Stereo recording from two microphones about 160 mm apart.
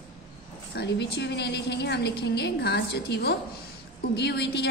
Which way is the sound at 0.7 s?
90° left.